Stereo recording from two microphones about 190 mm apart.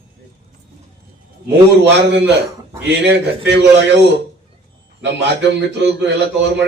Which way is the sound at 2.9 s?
65° right (ahead or behind).